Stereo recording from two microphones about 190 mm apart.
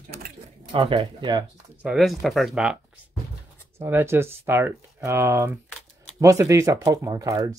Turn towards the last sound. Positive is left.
turn(degrees=-20)  # may be behind; listen again after turning